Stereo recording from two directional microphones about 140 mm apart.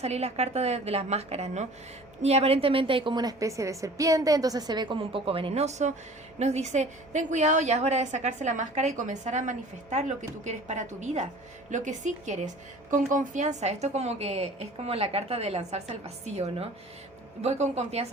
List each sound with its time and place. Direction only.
0.0 s a woman's voice: 50° right (ahead or behind)